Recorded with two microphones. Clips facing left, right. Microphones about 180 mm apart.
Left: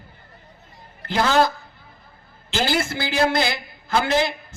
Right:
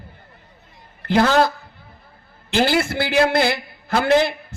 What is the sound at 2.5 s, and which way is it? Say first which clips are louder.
A man's voice: right 4 dB; 60° right (ahead or behind).